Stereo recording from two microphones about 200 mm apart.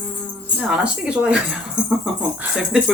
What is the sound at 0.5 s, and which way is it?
Speech, 5° right (ahead or behind).